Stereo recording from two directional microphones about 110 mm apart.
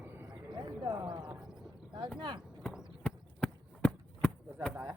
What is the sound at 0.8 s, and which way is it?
Horse, 35° right (ahead or behind).